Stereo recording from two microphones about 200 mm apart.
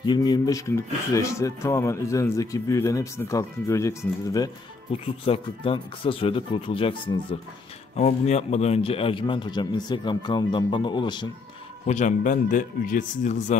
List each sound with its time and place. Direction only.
0.0 s speech: 20° left (ahead or behind)
5.0 s a man's voice: 30° left (ahead or behind)
11.9 s speech: 40° left (ahead or behind)